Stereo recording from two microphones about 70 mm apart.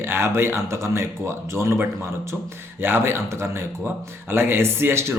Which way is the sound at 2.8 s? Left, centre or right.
Right.